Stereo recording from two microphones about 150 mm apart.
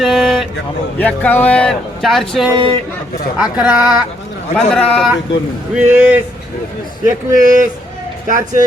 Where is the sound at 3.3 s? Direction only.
5° right (ahead or behind).